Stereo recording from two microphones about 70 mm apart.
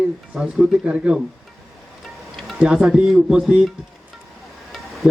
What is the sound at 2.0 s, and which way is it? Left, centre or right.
Music, centre.